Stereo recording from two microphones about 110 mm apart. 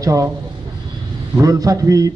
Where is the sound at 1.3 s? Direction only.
30° right (ahead or behind).